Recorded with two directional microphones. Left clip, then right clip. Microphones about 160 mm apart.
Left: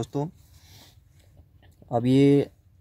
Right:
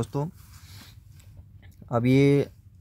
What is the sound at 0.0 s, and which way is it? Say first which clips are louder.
Speech: left 1 dB; 20° right (ahead or behind).